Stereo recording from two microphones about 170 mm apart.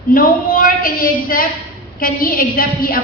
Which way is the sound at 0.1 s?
55° left (ahead or behind).